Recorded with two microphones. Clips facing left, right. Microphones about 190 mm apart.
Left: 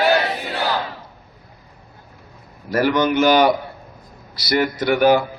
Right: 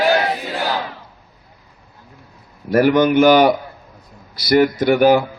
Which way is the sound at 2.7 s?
50° right (ahead or behind).